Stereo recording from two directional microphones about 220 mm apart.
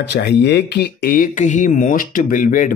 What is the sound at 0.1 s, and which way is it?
Speech, 50° left (ahead or behind).